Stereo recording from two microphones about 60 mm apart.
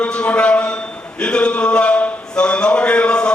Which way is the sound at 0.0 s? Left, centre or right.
Centre.